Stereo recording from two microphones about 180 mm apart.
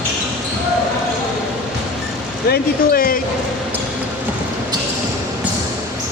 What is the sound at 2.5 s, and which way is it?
Speech, 55° left (ahead or behind).